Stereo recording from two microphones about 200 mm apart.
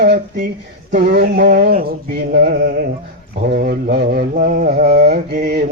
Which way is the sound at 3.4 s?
50° right (ahead or behind).